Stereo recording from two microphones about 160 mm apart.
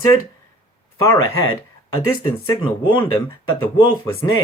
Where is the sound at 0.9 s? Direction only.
20° left (ahead or behind).